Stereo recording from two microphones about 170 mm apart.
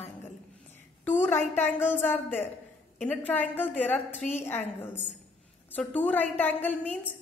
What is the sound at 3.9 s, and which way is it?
Speech, 40° left (ahead or behind).